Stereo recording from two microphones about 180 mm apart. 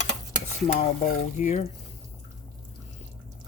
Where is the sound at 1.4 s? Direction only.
40° left (ahead or behind).